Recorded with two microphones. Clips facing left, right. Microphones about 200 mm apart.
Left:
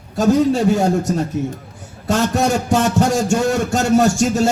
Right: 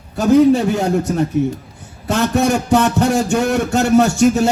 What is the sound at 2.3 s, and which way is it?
A man's voice, 60° right (ahead or behind).